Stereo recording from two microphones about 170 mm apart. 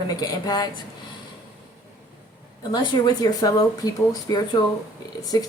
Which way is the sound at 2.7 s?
25° left (ahead or behind).